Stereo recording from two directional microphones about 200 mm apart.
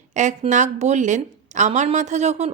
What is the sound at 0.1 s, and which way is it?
A woman's voice, 35° right (ahead or behind).